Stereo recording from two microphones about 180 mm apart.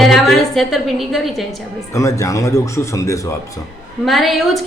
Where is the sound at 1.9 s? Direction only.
15° left (ahead or behind).